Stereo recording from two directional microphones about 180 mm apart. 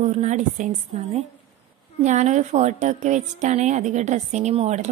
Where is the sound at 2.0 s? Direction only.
40° right (ahead or behind).